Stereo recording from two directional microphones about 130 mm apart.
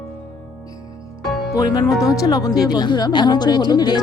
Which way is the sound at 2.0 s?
25° left (ahead or behind).